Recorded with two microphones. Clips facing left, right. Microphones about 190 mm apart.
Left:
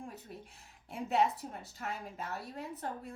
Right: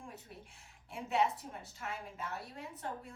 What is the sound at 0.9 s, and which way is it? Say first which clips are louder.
A woman's voice: left 2 dB; 40° left (ahead or behind).